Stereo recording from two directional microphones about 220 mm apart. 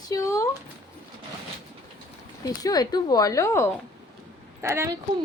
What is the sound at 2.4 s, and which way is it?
Speech, 15° left (ahead or behind).